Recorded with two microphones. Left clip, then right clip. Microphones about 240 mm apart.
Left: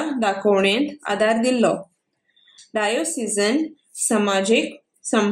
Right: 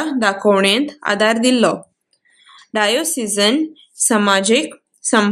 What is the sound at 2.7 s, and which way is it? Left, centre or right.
A woman's voice, right.